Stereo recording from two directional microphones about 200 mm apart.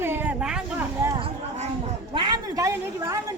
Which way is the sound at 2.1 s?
20° right (ahead or behind).